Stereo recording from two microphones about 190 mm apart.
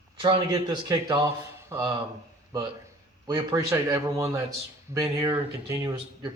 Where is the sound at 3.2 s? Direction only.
20° right (ahead or behind).